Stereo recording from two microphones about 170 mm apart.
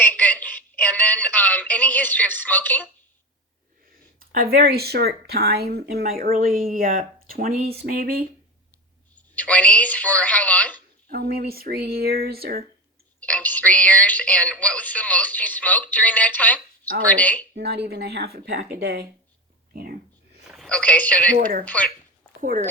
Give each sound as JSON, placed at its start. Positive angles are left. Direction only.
{"t": 0.0, "sound": "a sound", "side_deg": 10}
{"t": 0.9, "sound": "speech", "side_deg": 10}
{"t": 4.2, "sound": "speech", "side_deg": -60}
{"t": 9.1, "sound": "speech", "side_deg": 10}
{"t": 11.1, "sound": "speech", "side_deg": -65}
{"t": 13.1, "sound": "speech", "side_deg": 10}
{"t": 17.5, "sound": "speech", "side_deg": -75}
{"t": 20.5, "sound": "a man's voice", "side_deg": 5}
{"t": 22.4, "sound": "speech", "side_deg": -50}